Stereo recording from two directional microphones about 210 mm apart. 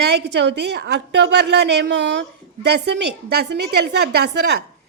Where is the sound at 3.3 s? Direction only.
50° right (ahead or behind).